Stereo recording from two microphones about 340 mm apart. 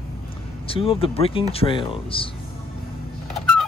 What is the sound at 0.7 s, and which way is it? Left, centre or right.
Speech, centre.